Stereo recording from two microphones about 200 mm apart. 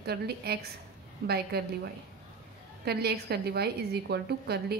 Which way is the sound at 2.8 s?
50° right (ahead or behind).